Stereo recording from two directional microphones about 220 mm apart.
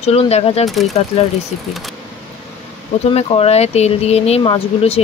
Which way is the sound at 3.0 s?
25° left (ahead or behind).